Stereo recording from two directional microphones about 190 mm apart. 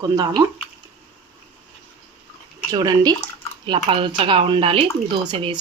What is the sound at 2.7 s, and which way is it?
Speech, 20° right (ahead or behind).